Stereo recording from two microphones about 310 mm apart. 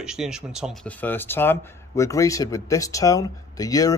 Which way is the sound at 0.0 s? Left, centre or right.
Centre.